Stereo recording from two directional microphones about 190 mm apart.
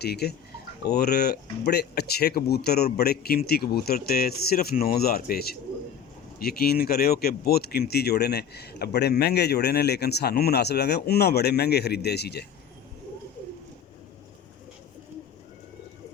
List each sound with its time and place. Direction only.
0.0 s speech: 55° left (ahead or behind)